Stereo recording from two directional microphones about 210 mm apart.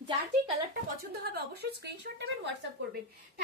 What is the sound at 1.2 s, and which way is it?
Speech, 50° right (ahead or behind).